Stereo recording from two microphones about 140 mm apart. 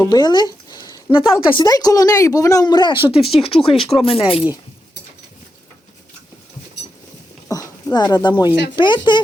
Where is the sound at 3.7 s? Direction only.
45° left (ahead or behind).